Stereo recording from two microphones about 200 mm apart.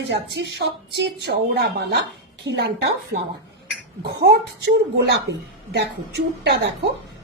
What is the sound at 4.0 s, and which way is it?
A woman's voice, 50° right (ahead or behind).